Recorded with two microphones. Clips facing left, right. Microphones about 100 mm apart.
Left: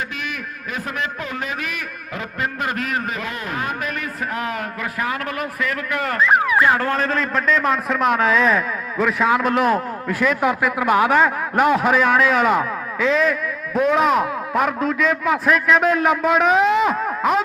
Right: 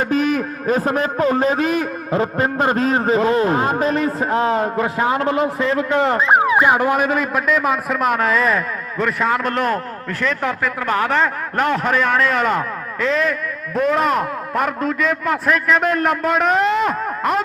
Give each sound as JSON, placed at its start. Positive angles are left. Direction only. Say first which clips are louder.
{"t": 0.1, "sound": "a man's voice", "louder": "right 12 dB", "side_deg": -35}